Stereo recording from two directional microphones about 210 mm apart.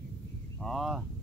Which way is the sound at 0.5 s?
Centre (ahead or behind).